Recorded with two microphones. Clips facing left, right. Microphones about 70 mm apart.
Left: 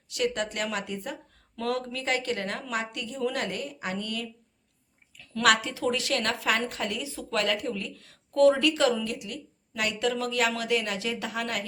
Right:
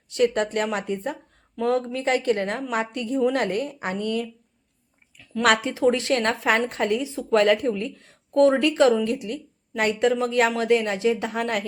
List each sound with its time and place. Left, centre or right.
0.1 s speech: right
5.4 s speech: right